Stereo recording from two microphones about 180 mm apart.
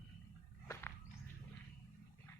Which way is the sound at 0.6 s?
15° left (ahead or behind).